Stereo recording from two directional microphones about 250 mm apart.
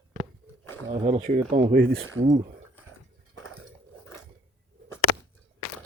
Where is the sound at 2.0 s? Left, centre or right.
Right.